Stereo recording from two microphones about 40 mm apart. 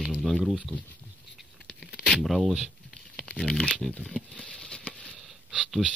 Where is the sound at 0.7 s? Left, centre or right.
Left.